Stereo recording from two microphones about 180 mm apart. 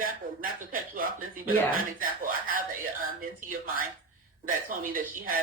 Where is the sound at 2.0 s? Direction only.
50° right (ahead or behind).